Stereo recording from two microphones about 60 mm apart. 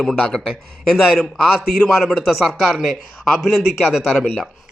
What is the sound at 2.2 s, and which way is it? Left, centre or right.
Speech, centre.